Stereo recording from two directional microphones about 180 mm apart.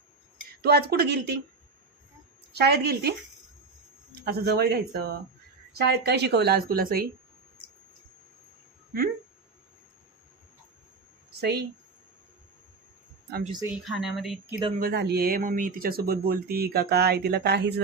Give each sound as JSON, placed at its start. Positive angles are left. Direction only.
{"t": 0.6, "sound": "speech", "side_deg": -60}
{"t": 2.6, "sound": "speech", "side_deg": -65}
{"t": 11.3, "sound": "speech", "side_deg": -65}
{"t": 13.8, "sound": "speech", "side_deg": 0}
{"t": 14.8, "sound": "speech", "side_deg": -60}